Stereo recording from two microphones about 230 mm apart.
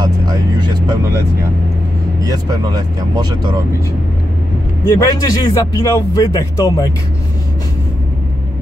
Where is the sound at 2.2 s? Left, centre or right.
Centre.